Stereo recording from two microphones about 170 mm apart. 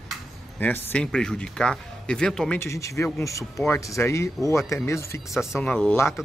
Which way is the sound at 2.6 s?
15° left (ahead or behind).